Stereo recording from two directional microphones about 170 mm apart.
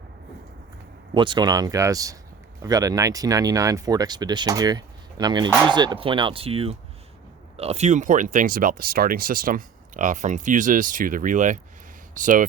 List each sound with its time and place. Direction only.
1.1 s speech: 30° right (ahead or behind)
5.7 s chopping: 25° right (ahead or behind)
7.5 s speech: 35° right (ahead or behind)